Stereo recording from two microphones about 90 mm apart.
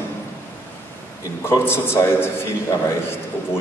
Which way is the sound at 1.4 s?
25° left (ahead or behind).